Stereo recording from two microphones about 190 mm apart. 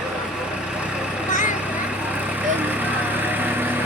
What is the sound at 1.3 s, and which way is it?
Vehicle, 40° left (ahead or behind).